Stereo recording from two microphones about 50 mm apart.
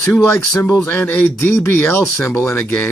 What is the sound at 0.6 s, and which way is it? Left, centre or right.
Speech, left.